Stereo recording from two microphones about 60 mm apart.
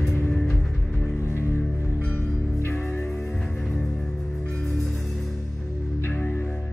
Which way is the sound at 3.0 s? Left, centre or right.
Centre.